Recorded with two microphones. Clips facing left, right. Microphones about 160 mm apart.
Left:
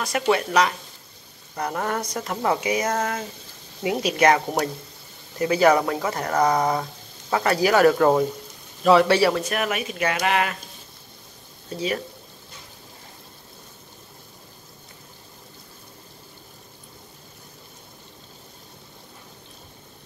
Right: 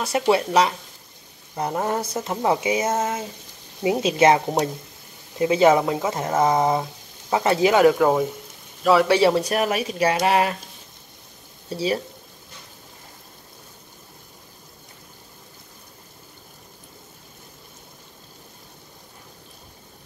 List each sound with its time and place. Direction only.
0.3 s speech: 25° right (ahead or behind); by 9.2 s 10° right (ahead or behind)
9.2 s speech: 30° right (ahead or behind)
11.7 s speech: 30° right (ahead or behind)